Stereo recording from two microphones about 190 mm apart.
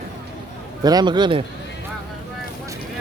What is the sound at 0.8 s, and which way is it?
Speech, 20° right (ahead or behind).